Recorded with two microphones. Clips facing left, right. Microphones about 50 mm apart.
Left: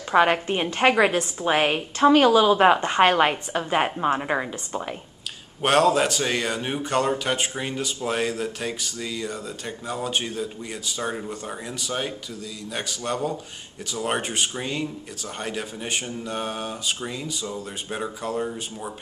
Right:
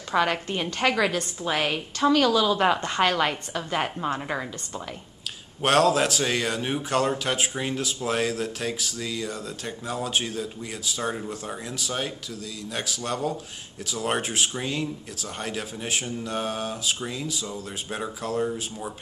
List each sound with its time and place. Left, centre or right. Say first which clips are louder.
0.1 s a woman's voice: left 5 dB; left
5.6 s a man's voice: left 1 dB; centre